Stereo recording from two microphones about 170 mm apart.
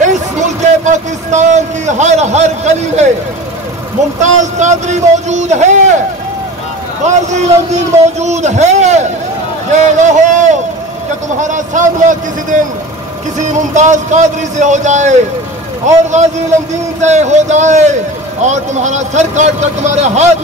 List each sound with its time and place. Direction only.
0.0 s a sound: 45° right (ahead or behind)
4.2 s a man's voice: 45° right (ahead or behind)
7.0 s a man's voice: 45° right (ahead or behind)
10.0 s a man's voice: 45° right (ahead or behind)